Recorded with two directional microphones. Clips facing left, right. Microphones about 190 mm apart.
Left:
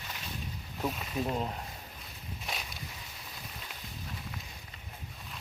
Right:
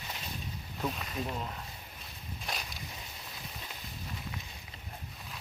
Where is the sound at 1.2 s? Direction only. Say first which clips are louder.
Left 7 dB; 30° left (ahead or behind).